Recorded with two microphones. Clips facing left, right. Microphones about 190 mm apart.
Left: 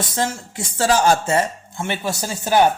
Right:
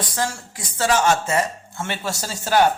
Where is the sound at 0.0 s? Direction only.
25° left (ahead or behind).